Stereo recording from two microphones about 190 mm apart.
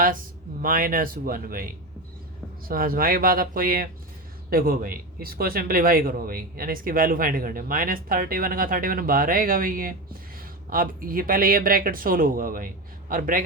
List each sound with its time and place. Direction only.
0.0 s speech: 45° right (ahead or behind)